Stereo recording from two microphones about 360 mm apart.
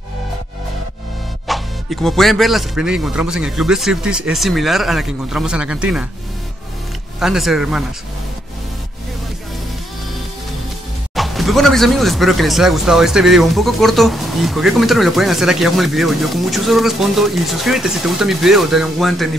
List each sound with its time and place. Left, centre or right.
1.5 s speech: centre
7.2 s speech: centre
11.1 s speech: centre